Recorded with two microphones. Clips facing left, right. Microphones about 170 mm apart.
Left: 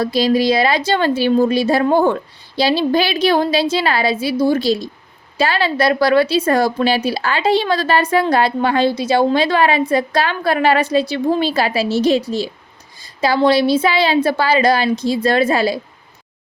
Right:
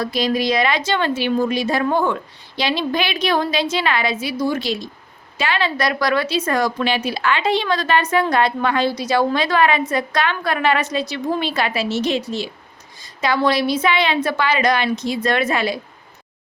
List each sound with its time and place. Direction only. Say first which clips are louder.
0.0 s a woman's voice: left 5 dB; 30° left (ahead or behind)